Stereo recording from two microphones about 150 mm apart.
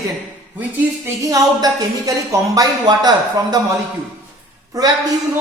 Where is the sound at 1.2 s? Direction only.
25° right (ahead or behind).